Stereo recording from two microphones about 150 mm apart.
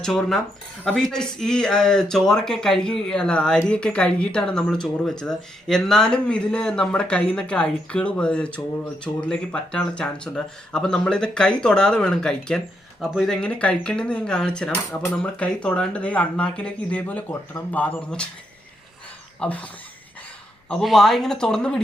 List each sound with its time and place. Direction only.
0.0 s speech: 5° left (ahead or behind)
19.4 s speech: 10° left (ahead or behind)